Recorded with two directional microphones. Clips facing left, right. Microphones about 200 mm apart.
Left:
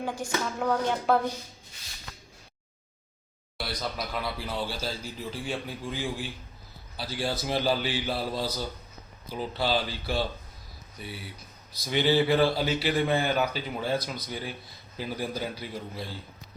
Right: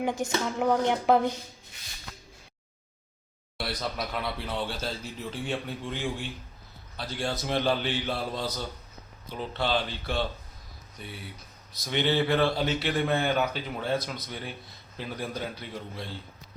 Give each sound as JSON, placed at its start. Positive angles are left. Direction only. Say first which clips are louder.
{"t": 0.0, "sound": "speech", "louder": "right 3 dB", "side_deg": -20}
{"t": 3.6, "sound": "speech", "louder": "right 1 dB", "side_deg": 0}